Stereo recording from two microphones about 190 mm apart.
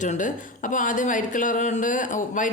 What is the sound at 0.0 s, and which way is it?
Speech, 40° left (ahead or behind).